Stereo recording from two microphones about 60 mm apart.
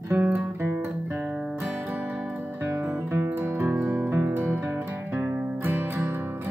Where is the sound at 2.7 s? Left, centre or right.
Right.